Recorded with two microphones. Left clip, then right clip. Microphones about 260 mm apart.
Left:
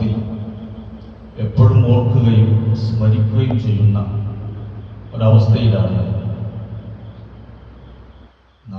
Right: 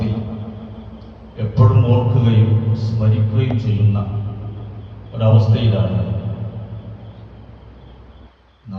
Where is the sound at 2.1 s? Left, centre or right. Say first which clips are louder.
Left 1 dB; centre.